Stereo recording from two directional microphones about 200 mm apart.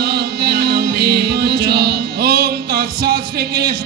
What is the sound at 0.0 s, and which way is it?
Music, 50° right (ahead or behind).